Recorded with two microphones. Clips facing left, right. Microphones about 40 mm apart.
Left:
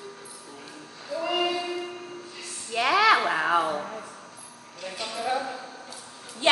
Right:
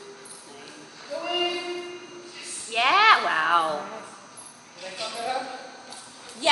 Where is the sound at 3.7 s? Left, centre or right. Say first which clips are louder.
Even; centre.